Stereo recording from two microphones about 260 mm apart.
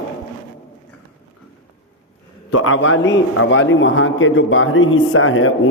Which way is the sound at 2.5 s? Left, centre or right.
Left.